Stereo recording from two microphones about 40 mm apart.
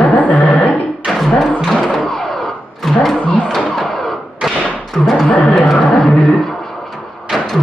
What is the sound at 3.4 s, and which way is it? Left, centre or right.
Music, centre.